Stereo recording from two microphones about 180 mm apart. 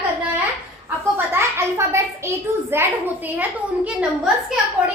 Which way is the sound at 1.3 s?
15° right (ahead or behind).